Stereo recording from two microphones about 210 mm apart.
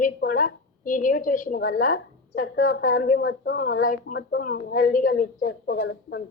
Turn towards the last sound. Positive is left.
turn(degrees=55)  # may be behind; listen again after turning